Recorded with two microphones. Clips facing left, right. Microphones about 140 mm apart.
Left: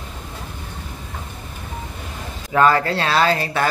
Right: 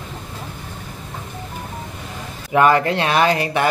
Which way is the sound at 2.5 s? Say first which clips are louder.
Right 1 dB; 20° right (ahead or behind).